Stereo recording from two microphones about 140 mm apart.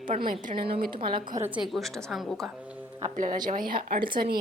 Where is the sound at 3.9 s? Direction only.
35° right (ahead or behind).